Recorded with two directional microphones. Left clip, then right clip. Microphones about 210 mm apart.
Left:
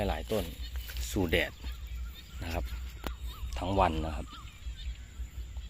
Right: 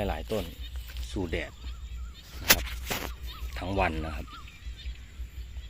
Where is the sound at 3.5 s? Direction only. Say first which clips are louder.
Left 1 dB; 10° left (ahead or behind).